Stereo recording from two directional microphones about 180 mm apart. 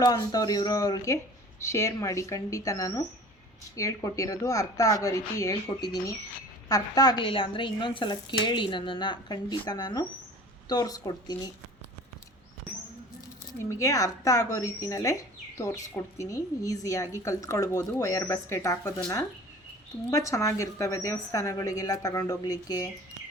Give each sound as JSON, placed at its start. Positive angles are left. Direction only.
{"t": 0.0, "sound": "speech", "side_deg": 20}
{"t": 13.5, "sound": "speech", "side_deg": 15}
{"t": 20.1, "sound": "speech", "side_deg": 15}